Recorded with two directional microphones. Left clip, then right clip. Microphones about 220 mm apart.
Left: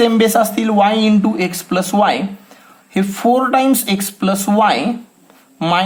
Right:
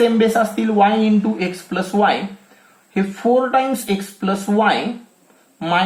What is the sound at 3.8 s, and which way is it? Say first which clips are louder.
Speech: left 3 dB; 40° left (ahead or behind).